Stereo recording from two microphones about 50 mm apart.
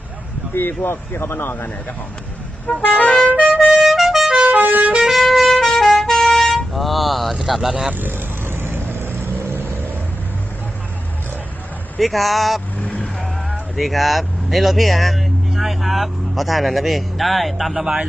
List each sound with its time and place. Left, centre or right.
0.5 s speech: left
2.6 s vehicle: left
3.2 s music: right
3.6 s music: centre
4.4 s vehicle horn: right
4.9 s music: centre
7.9 s vehicle: right
11.9 s speech: centre
12.8 s vehicle: left
13.2 s speech: centre